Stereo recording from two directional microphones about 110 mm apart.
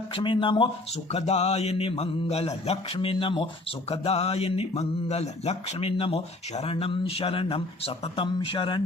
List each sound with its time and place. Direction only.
0.1 s speech: 50° left (ahead or behind)
1.1 s speech: 80° left; by 8.8 s 50° left (ahead or behind)